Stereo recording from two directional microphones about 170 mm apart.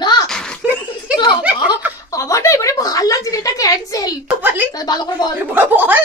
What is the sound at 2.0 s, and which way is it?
A woman's voice, 20° left (ahead or behind).